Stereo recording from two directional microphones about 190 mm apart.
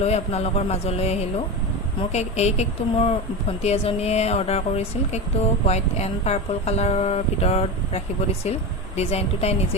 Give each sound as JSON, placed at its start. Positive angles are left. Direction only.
{"t": 0.0, "sound": "speech", "side_deg": 35}